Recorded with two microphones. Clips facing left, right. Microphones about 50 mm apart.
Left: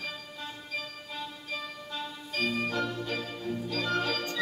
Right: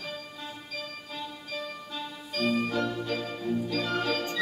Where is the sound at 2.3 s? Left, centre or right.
Centre.